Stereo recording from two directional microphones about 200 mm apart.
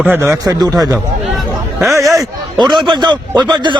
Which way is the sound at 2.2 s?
20° right (ahead or behind).